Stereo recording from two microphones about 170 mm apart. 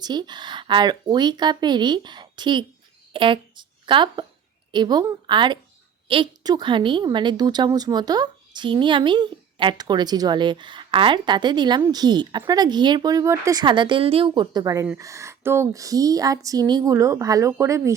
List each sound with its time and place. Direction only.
0.0 s a woman's voice: 25° right (ahead or behind)